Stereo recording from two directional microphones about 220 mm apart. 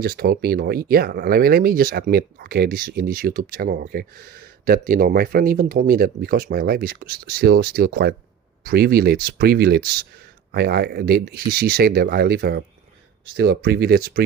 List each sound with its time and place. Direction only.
0.0 s speech: 45° right (ahead or behind)